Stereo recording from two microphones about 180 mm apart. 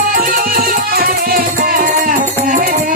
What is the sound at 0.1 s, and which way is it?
Music, 50° right (ahead or behind).